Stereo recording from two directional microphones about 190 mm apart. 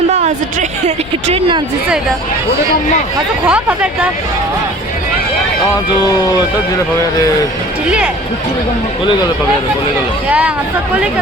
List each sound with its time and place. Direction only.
0.9 s speech: 30° right (ahead or behind)
3.4 s speech: 5° right (ahead or behind)
6.0 s speech: 20° left (ahead or behind)
7.9 s speech: 5° right (ahead or behind)
10.2 s speech: 5° right (ahead or behind)